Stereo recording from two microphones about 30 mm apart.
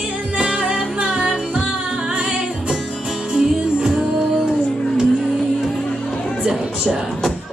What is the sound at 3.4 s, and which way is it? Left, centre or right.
Music, centre.